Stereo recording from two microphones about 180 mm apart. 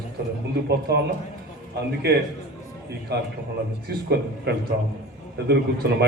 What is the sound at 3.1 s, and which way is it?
A man's voice, 65° right (ahead or behind).